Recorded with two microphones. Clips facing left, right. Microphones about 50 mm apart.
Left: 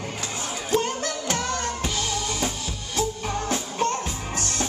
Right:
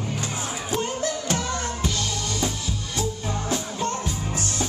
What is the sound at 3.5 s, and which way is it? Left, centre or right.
Music, left.